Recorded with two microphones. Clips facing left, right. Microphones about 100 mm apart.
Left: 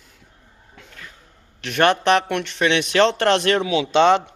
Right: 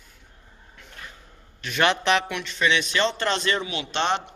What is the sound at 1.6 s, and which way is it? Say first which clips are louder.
A man's voice: left 5 dB; 55° left (ahead or behind).